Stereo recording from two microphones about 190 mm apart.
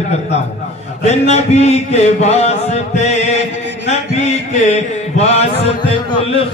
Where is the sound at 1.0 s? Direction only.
35° left (ahead or behind).